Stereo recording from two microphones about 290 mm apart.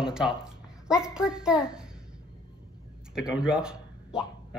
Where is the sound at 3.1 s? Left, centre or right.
Centre.